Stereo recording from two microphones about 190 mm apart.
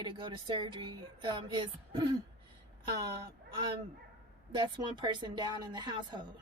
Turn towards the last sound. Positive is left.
turn(degrees=-25)  # may be behind; listen again after turning